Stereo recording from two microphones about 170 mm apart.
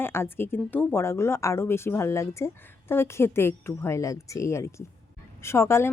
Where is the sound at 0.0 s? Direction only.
15° left (ahead or behind).